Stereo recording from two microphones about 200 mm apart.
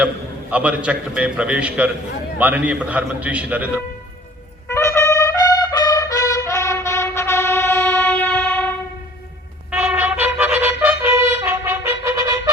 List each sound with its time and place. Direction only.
0.5 s a man's voice: 5° right (ahead or behind)
4.7 s trumpet: 15° left (ahead or behind)
9.7 s trumpet: 5° right (ahead or behind)